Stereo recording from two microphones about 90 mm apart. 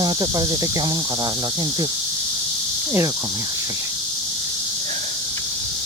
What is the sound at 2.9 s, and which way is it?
Speech, 30° right (ahead or behind).